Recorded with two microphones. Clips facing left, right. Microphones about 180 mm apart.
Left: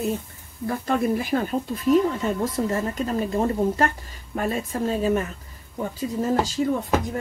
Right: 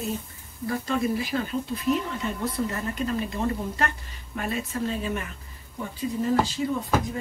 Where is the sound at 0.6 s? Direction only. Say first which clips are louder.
Left 3 dB; 55° left (ahead or behind).